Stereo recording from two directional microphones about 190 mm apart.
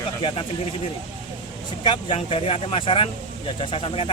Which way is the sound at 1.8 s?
25° left (ahead or behind).